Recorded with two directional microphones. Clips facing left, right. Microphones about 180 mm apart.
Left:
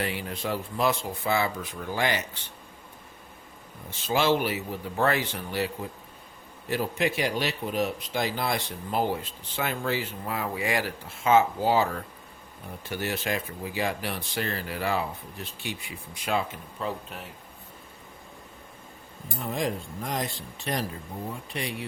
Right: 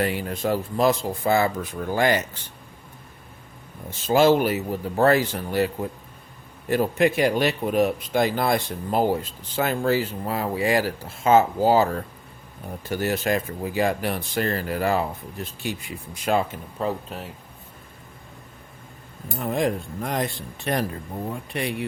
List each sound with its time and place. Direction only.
0.0 s speech: 45° right (ahead or behind)
4.0 s speech: 45° right (ahead or behind)
19.4 s speech: 55° right (ahead or behind)